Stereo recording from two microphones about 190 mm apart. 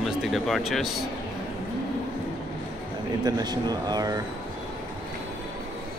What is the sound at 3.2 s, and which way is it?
Speech, 20° right (ahead or behind).